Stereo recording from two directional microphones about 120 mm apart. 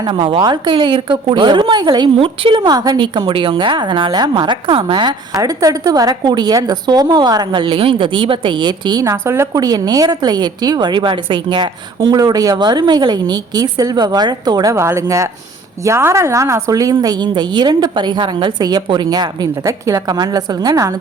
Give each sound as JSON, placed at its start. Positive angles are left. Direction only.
{"t": 0.0, "sound": "a woman's voice", "side_deg": -45}
{"t": 2.1, "sound": "a woman's voice", "side_deg": -50}
{"t": 5.3, "sound": "a woman's voice", "side_deg": -30}